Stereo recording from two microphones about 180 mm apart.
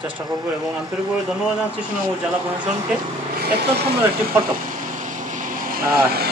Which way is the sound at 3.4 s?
65° right (ahead or behind).